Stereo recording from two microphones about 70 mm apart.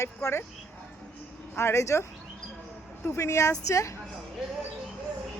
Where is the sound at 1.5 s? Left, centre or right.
Left.